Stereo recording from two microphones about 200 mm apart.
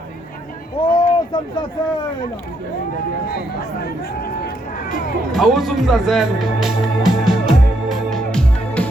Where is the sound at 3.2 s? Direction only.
50° left (ahead or behind).